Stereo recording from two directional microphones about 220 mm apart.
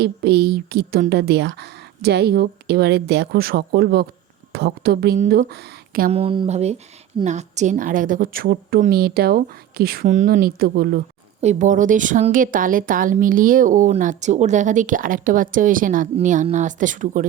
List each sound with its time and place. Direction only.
0.0 s a woman's voice: 50° right (ahead or behind)
5.1 s speech: 35° right (ahead or behind)
6.1 s speech: 25° right (ahead or behind); by 11.0 s 45° right (ahead or behind)
11.3 s speech: 35° right (ahead or behind)